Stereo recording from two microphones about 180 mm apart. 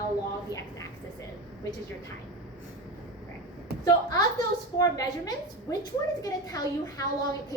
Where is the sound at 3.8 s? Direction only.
20° left (ahead or behind).